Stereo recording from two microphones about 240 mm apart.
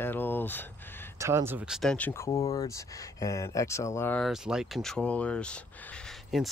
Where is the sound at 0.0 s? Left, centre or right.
Centre.